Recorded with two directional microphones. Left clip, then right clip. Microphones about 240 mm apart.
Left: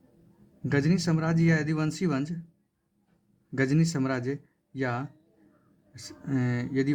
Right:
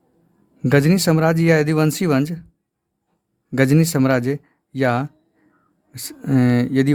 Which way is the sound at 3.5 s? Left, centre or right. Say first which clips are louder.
Right 10 dB; right.